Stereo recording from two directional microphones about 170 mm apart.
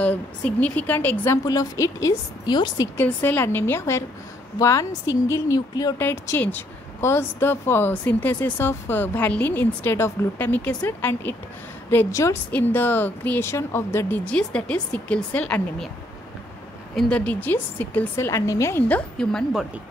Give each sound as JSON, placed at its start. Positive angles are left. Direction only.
{"t": 0.0, "sound": "a woman's voice", "side_deg": 10}
{"t": 3.0, "sound": "a woman's voice", "side_deg": 10}
{"t": 16.9, "sound": "a woman's voice", "side_deg": 5}